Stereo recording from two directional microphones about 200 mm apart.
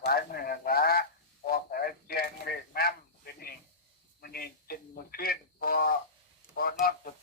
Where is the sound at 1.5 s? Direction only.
45° left (ahead or behind).